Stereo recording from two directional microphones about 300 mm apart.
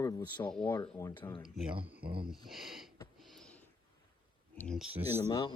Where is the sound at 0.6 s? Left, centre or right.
Centre.